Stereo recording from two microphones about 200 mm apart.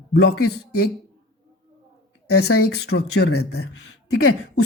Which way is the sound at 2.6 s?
90° left.